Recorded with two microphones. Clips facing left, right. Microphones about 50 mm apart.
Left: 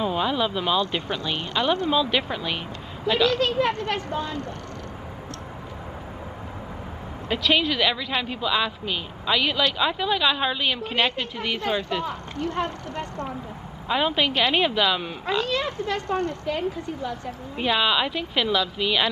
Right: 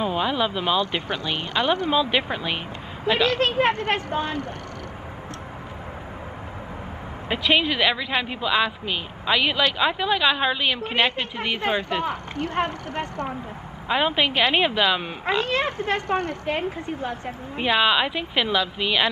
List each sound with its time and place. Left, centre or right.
0.0 s speech: centre
1.1 s a woman's voice: right
3.3 s a woman's voice: right
7.2 s speech: centre
10.9 s a woman's voice: right
13.8 s speech: centre
15.2 s a woman's voice: right
17.6 s speech: centre